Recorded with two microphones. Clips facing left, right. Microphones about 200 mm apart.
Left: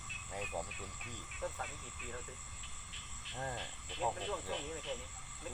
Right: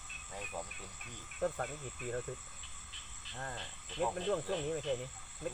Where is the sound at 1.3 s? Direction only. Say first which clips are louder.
Right 7 dB; 50° right (ahead or behind).